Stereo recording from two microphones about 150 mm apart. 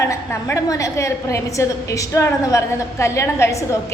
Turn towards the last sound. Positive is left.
turn(degrees=20)  # may be behind; listen again after turning